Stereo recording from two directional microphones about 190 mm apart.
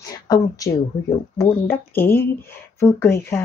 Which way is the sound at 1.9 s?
10° left (ahead or behind).